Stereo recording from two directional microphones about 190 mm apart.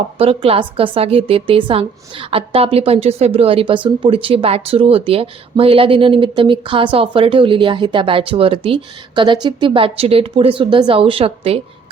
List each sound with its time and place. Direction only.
0.2 s speech: 30° right (ahead or behind)